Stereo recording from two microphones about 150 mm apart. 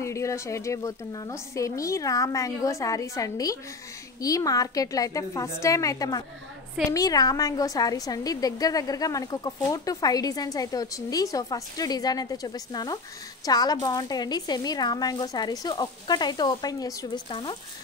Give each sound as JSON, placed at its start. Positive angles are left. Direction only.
{"t": 0.0, "sound": "a woman's voice", "side_deg": 20}